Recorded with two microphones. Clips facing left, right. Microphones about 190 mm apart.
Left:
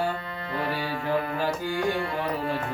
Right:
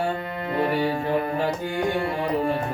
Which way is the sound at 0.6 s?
25° right (ahead or behind).